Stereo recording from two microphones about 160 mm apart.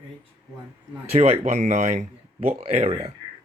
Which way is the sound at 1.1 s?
40° right (ahead or behind).